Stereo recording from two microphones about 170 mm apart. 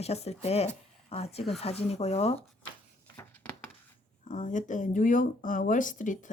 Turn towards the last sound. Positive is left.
turn(degrees=50)  # may be behind; listen again after turning